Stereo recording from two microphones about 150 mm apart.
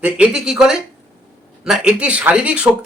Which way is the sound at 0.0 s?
5° right (ahead or behind).